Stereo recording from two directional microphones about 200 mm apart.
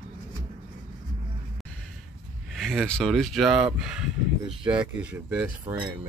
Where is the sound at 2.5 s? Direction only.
Centre (ahead or behind).